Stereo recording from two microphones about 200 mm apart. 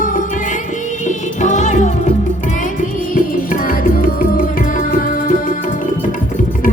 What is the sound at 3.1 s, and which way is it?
Music, 45° left (ahead or behind).